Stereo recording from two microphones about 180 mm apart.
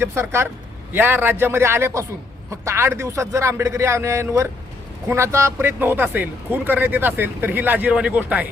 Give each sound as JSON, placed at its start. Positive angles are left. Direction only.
{"t": 0.0, "sound": "speech", "side_deg": -15}